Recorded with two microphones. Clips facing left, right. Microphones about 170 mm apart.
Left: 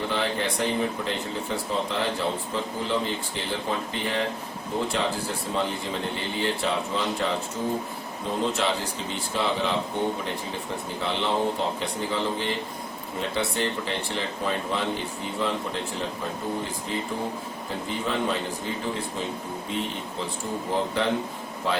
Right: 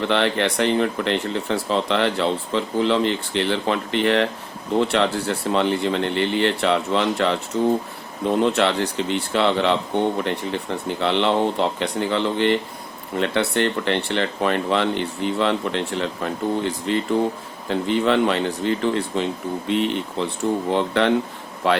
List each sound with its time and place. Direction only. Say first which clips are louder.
0.1 s speech: right 7 dB; 75° right (ahead or behind)